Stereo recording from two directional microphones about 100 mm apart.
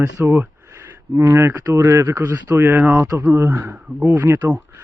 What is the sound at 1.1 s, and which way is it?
A man's voice, 30° right (ahead or behind).